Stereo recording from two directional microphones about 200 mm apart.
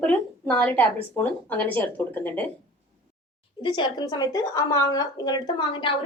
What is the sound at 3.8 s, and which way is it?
A woman's voice, 20° left (ahead or behind).